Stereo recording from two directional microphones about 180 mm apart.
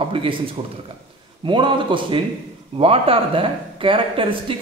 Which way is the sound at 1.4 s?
25° right (ahead or behind).